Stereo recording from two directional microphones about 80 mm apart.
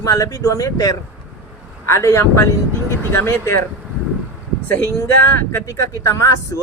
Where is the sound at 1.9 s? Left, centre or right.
Left.